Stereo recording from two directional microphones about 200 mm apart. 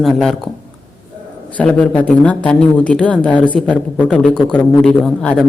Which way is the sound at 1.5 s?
5° left (ahead or behind).